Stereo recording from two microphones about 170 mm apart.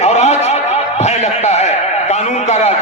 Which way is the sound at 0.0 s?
40° left (ahead or behind).